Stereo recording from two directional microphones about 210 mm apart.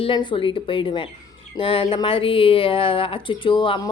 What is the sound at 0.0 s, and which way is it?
A woman's voice, 25° left (ahead or behind).